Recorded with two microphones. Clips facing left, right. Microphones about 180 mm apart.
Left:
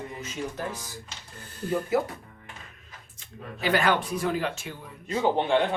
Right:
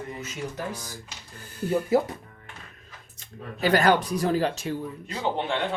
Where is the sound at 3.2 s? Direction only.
40° right (ahead or behind).